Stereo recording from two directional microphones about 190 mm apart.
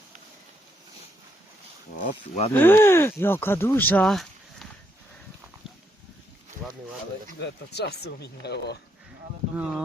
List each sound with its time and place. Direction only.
2.0 s speech: 40° left (ahead or behind)
2.5 s speech: 10° left (ahead or behind)
6.6 s a sound: centre (ahead or behind)
7.3 s speech: 60° left (ahead or behind)
9.6 s speech: 5° right (ahead or behind)